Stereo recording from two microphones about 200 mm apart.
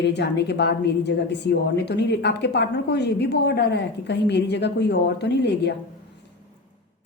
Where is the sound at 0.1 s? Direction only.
60° left (ahead or behind).